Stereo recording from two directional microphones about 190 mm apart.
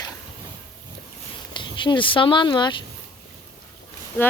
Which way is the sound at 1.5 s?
25° left (ahead or behind).